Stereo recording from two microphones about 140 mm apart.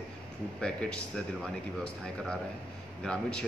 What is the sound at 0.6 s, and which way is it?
Speech, 5° left (ahead or behind).